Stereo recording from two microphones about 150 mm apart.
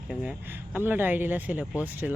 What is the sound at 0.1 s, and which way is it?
Speech, 5° right (ahead or behind).